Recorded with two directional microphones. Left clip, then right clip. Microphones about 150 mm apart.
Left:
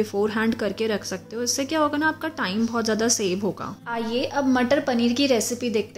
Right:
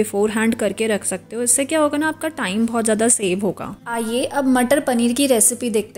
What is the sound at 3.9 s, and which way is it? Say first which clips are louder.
A woman's voice: right 4 dB; 45° right (ahead or behind).